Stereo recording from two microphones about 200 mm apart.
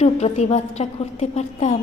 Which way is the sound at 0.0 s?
35° left (ahead or behind).